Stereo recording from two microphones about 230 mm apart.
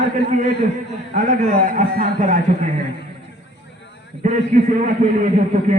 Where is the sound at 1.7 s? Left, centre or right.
Right.